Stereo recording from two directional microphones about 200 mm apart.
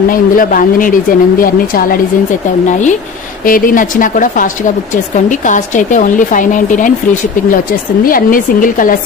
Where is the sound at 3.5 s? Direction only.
45° left (ahead or behind).